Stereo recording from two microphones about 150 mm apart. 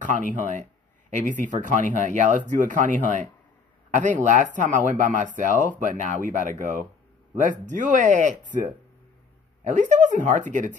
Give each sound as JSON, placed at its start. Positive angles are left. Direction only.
{"t": 0.0, "sound": "speech", "side_deg": -60}